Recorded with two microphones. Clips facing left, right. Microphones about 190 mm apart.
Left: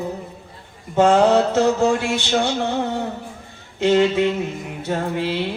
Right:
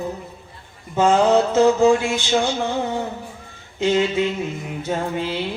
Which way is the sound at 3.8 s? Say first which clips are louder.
Left 3 dB; 60° left (ahead or behind).